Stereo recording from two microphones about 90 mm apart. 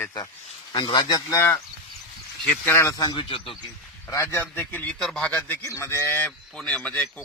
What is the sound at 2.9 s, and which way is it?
Speech, 50° left (ahead or behind).